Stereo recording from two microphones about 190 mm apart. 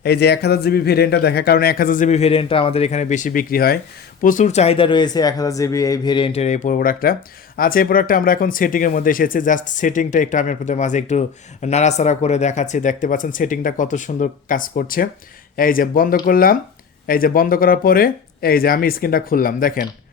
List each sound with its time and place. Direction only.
0.0 s speech: 60° left (ahead or behind)